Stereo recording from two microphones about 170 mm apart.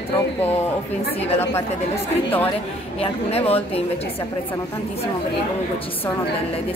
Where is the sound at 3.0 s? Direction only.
35° left (ahead or behind).